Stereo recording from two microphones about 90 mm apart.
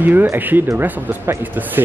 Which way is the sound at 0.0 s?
20° right (ahead or behind).